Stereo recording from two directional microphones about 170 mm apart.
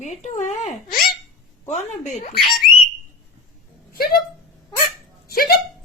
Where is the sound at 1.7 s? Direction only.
45° left (ahead or behind).